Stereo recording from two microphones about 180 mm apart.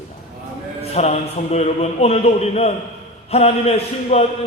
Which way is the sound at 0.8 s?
35° left (ahead or behind).